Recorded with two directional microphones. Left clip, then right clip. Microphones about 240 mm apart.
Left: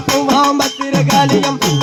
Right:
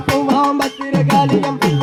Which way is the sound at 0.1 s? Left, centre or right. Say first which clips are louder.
Left 2 dB; centre.